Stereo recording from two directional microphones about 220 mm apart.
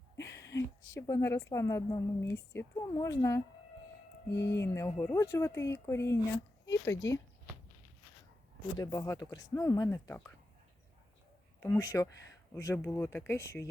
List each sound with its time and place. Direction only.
0.3 s a sound: 55° left (ahead or behind)
0.5 s a woman's voice: 15° left (ahead or behind)
4.4 s a woman's voice: 10° left (ahead or behind)
8.8 s a woman's voice: 15° left (ahead or behind)
11.6 s a woman's voice: 10° left (ahead or behind)